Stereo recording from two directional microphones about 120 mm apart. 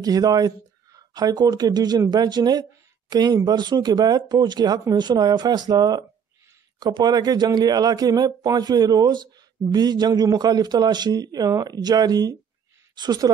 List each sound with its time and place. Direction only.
0.0 s a woman's voice: 30° right (ahead or behind)